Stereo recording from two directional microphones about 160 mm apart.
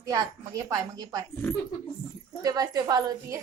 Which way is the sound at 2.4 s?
20° right (ahead or behind).